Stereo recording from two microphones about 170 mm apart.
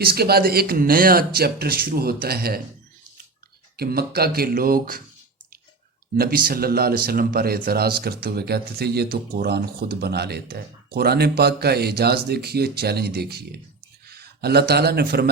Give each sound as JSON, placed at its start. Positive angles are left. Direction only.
{"t": 0.0, "sound": "speech", "side_deg": -65}
{"t": 3.8, "sound": "speech", "side_deg": -65}
{"t": 6.1, "sound": "speech", "side_deg": -60}